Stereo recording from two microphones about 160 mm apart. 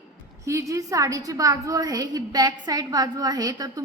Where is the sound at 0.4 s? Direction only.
20° right (ahead or behind).